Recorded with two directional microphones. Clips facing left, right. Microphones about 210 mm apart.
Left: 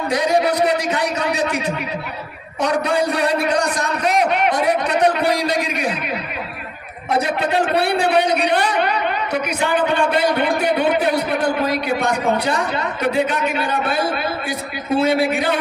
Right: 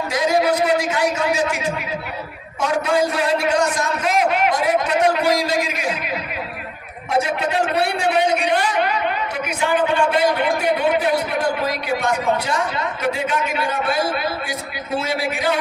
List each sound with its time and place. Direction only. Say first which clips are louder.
0.1 s a man's voice: left 1 dB; 35° left (ahead or behind)
2.8 s a man's voice: even; 35° left (ahead or behind)
7.9 s a man's voice: left 2 dB; 35° left (ahead or behind)
15.0 s a man's voice: left 5 dB; 55° left (ahead or behind)